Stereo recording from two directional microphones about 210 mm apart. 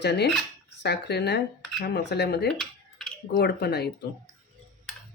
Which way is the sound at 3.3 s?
50° left (ahead or behind).